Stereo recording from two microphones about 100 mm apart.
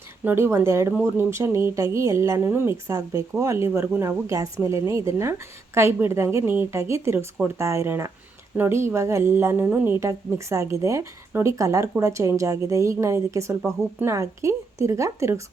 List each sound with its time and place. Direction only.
0.3 s a woman's voice: 25° right (ahead or behind)